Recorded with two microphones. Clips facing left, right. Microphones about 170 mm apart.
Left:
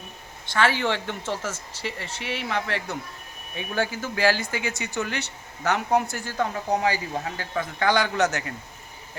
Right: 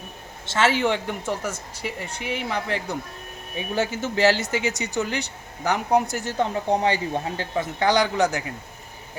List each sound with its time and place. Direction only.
0.4 s speech: 25° right (ahead or behind)